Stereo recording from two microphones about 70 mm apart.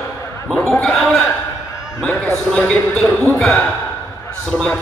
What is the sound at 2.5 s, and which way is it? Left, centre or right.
Speech, centre.